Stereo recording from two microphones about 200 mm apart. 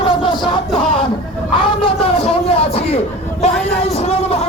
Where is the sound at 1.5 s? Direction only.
25° left (ahead or behind).